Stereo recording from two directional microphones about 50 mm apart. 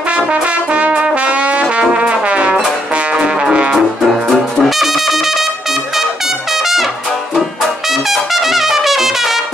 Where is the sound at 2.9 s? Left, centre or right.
Centre.